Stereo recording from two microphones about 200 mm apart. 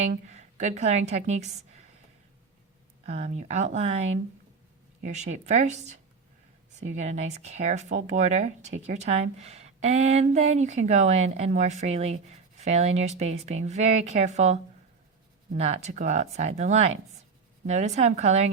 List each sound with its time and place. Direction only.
0.0 s a woman's voice: 35° right (ahead or behind)
3.1 s speech: 35° right (ahead or behind)